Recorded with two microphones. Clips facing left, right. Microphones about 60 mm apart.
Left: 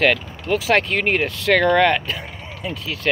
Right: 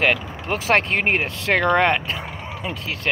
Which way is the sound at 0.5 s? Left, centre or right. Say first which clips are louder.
Left 1 dB; right.